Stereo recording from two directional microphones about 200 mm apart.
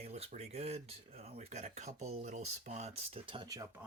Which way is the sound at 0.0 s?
30° right (ahead or behind).